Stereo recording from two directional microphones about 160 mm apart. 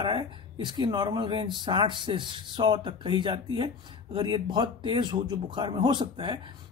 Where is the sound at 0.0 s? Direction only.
30° right (ahead or behind).